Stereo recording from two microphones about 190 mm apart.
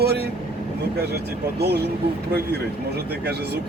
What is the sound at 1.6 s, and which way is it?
Speech, 60° right (ahead or behind).